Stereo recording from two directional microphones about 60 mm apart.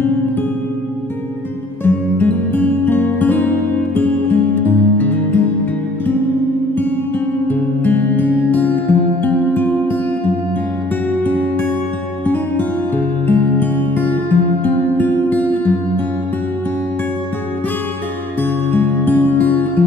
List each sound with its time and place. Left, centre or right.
1.9 s music: left
7.4 s music: left
12.3 s music: left
18.7 s music: left